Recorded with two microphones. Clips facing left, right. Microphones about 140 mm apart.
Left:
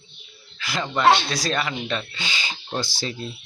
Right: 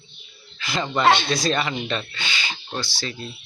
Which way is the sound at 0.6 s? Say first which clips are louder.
Right 1 dB; 5° left (ahead or behind).